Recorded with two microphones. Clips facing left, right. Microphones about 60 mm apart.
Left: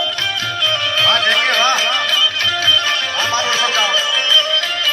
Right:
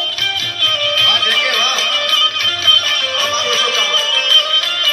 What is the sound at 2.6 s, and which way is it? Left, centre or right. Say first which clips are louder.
Music: right 3 dB; centre.